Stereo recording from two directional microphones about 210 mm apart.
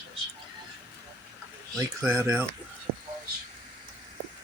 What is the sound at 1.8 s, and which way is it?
Speech, 10° right (ahead or behind).